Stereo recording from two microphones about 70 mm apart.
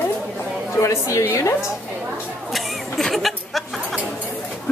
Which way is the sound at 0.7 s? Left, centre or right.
Left.